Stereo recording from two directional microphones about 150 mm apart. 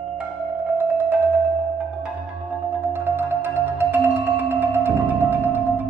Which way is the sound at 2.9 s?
15° right (ahead or behind).